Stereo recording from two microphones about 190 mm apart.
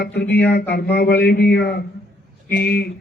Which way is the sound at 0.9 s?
60° left (ahead or behind).